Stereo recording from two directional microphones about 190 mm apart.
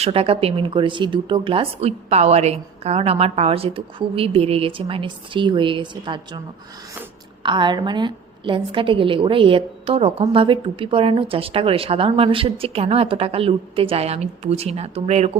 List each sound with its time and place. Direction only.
0.0 s a woman's voice: 30° right (ahead or behind)
7.4 s a woman's voice: 25° right (ahead or behind)